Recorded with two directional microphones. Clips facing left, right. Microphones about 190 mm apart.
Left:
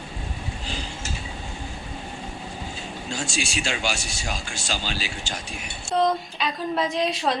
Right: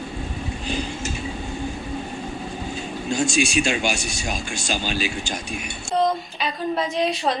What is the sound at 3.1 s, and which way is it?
Speech, 15° right (ahead or behind).